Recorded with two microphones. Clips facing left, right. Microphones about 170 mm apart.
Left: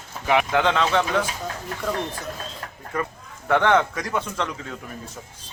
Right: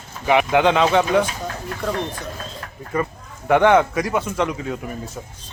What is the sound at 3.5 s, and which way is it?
Speech, 15° right (ahead or behind).